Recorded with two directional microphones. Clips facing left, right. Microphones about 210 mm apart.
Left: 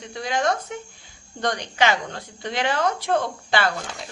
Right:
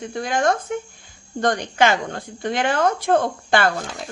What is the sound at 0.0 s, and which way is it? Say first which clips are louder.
A woman's voice: right 3 dB; 50° right (ahead or behind).